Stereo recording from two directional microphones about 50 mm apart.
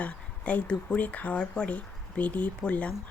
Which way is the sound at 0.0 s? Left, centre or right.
Left.